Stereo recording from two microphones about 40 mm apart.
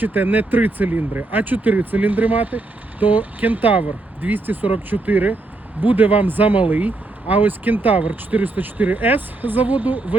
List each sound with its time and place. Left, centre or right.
0.0 s speech: right